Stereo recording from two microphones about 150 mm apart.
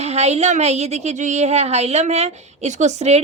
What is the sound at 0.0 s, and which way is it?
A woman's voice, 45° right (ahead or behind).